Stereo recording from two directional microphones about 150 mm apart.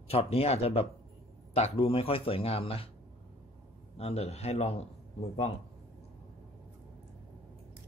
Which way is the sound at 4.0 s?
45° left (ahead or behind).